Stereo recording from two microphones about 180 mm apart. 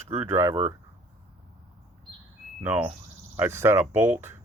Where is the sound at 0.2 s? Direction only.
15° right (ahead or behind).